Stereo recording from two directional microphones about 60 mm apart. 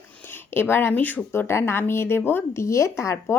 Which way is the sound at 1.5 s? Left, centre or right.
Left.